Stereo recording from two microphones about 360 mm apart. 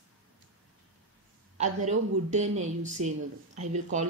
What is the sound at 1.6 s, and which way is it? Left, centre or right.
Speech, centre.